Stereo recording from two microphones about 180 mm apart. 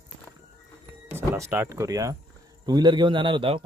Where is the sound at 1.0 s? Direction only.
15° right (ahead or behind).